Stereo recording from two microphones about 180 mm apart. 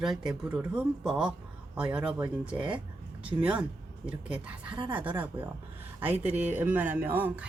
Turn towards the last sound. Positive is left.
turn(degrees=-10)  # may be behind; listen again after turning